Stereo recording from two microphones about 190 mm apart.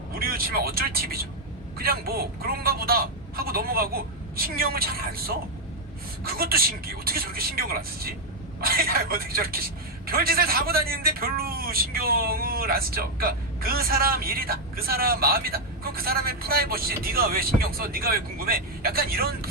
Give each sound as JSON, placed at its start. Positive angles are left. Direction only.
{"t": 0.1, "sound": "speech", "side_deg": -50}